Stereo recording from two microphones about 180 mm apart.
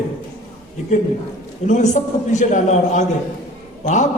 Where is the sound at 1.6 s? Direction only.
40° left (ahead or behind).